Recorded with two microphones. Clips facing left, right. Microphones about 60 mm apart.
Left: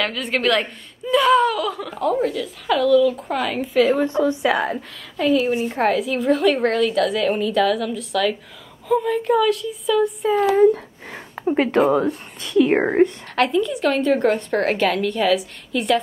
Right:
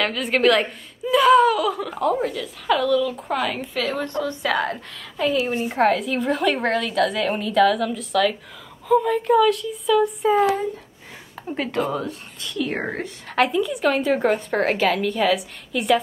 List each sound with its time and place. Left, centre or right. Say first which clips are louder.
0.0 s a woman's voice: right 2 dB; centre
11.4 s speech: left 8 dB; left
13.3 s a woman's voice: left 1 dB; centre